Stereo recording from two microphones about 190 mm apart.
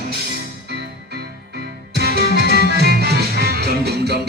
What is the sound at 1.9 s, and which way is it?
Music, 55° right (ahead or behind).